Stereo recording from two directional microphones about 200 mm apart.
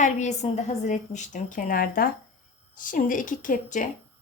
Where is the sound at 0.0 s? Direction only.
35° left (ahead or behind).